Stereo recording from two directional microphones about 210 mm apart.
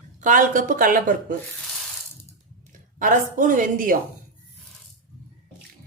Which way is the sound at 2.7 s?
40° right (ahead or behind).